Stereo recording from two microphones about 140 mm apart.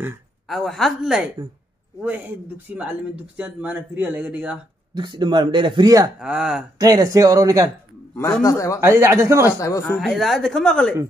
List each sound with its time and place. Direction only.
0.5 s speech: centre (ahead or behind)
4.9 s a man's voice: 35° right (ahead or behind)
6.1 s speech: 5° right (ahead or behind)
6.8 s speech: 25° right (ahead or behind)
8.2 s a man's voice: 20° left (ahead or behind)
8.7 s speech: 20° right (ahead or behind)
9.6 s a man's voice: 20° left (ahead or behind)
9.8 s speech: centre (ahead or behind)